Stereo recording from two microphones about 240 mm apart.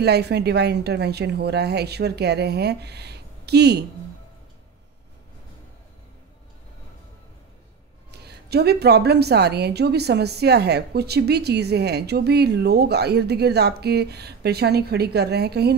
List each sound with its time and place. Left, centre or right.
0.0 s a woman's voice: right
8.1 s a woman's voice: right